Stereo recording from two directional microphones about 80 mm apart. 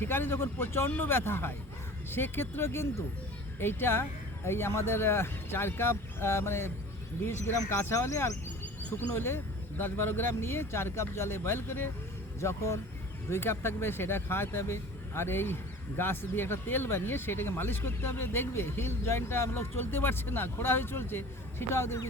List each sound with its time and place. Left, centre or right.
0.0 s speech: left